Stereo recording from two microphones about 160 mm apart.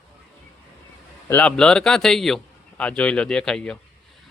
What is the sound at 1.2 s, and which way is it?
Speech, 10° left (ahead or behind).